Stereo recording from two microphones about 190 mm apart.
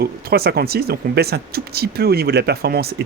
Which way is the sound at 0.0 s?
55° right (ahead or behind).